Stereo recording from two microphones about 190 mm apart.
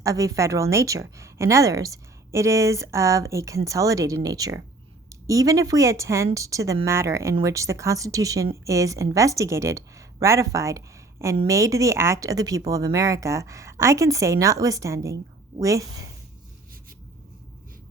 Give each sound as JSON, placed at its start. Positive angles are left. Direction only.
{"t": 0.0, "sound": "a woman's voice", "side_deg": -15}